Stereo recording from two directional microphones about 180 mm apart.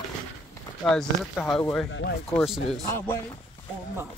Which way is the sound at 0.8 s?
5° left (ahead or behind).